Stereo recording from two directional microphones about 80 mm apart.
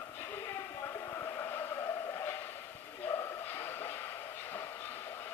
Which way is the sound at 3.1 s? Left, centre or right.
Left.